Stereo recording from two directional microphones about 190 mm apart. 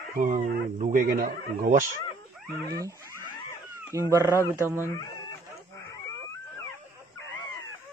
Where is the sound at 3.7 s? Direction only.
15° right (ahead or behind).